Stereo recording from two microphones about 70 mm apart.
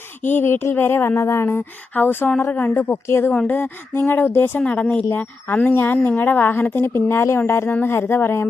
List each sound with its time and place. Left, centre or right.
0.2 s speech: left
4.6 s a woman's voice: centre
6.8 s speech: left